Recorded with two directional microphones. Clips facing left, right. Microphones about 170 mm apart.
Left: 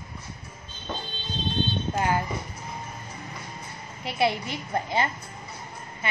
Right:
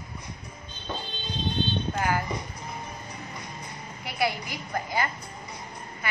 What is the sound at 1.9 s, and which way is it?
Speech, 25° left (ahead or behind).